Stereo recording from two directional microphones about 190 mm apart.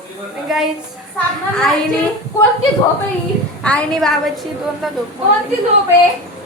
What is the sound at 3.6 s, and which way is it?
A woman's voice, 5° left (ahead or behind).